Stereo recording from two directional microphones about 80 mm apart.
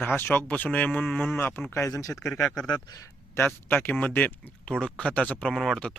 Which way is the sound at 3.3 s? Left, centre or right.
Left.